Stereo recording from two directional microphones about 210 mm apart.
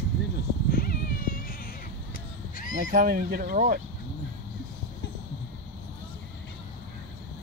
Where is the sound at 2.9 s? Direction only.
40° right (ahead or behind).